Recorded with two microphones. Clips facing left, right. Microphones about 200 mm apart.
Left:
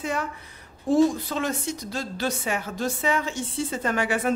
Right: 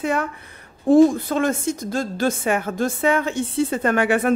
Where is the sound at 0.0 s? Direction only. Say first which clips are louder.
Right 6 dB; 60° right (ahead or behind).